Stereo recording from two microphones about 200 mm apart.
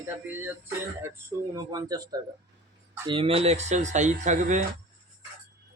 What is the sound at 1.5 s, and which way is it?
Speech, 20° right (ahead or behind).